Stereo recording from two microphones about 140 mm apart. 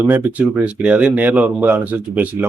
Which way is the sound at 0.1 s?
10° right (ahead or behind).